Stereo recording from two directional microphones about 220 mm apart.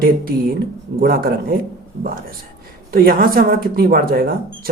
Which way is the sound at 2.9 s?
40° right (ahead or behind).